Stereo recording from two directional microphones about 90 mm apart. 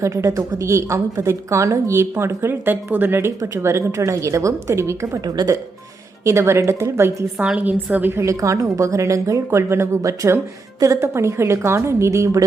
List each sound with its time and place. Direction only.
0.0 s a woman's voice: 35° right (ahead or behind)
7.3 s a woman's voice: 10° right (ahead or behind); by 12.5 s 35° right (ahead or behind)